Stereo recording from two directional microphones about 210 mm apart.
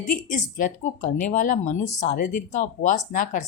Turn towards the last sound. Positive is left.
turn(degrees=40)  # may be behind; listen again after turning